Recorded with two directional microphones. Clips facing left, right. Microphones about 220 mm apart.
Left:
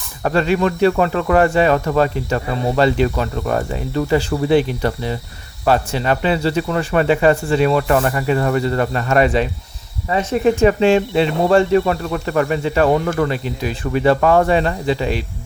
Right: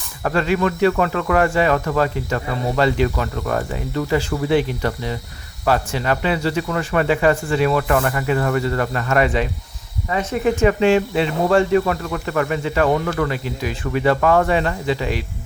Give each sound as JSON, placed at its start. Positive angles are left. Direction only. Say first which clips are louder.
{"t": 0.2, "sound": "speech", "louder": "left 2 dB", "side_deg": 25}